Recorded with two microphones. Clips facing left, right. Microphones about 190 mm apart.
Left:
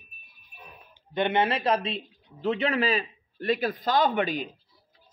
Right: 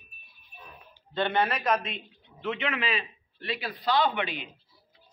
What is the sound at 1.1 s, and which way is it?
A man's voice, 20° left (ahead or behind).